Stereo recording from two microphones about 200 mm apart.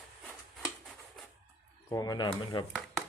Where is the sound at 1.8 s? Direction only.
15° left (ahead or behind).